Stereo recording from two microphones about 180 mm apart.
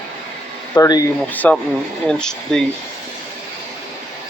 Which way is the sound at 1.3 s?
10° left (ahead or behind).